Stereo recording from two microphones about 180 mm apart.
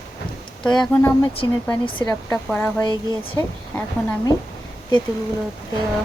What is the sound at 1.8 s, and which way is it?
Speech, 25° left (ahead or behind).